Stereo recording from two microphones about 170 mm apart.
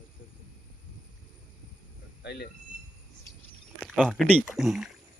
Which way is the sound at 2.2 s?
75° left (ahead or behind).